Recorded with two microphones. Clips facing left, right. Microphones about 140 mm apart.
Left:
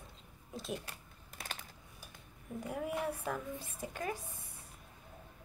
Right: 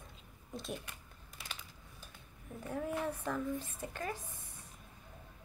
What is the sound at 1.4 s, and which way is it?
Typing, 55° left (ahead or behind).